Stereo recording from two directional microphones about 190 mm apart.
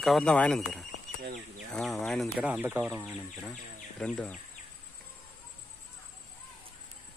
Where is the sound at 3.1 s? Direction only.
5° left (ahead or behind).